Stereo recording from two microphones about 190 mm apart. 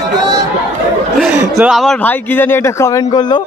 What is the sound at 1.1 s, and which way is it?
Speech, 5° right (ahead or behind).